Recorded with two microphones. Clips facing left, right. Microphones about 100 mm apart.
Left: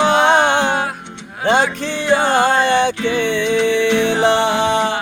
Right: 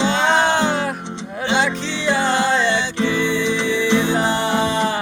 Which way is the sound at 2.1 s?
55° left (ahead or behind).